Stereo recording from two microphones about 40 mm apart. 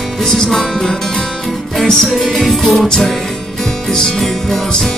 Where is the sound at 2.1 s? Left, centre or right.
Centre.